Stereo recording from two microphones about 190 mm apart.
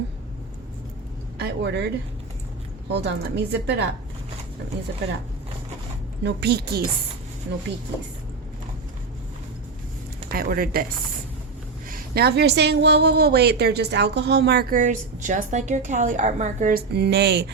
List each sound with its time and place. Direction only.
1.4 s speech: 65° right (ahead or behind)
2.9 s a woman's voice: 60° right (ahead or behind)
6.2 s a woman's voice: 60° right (ahead or behind)
10.3 s speech: 50° right (ahead or behind)
11.9 s a woman's voice: 55° right (ahead or behind)
16.9 s a woman's voice: 60° right (ahead or behind)